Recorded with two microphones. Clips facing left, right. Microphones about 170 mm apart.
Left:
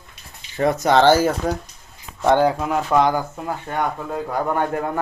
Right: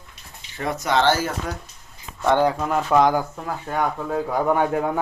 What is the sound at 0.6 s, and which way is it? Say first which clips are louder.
Speech: left 5 dB; 40° left (ahead or behind).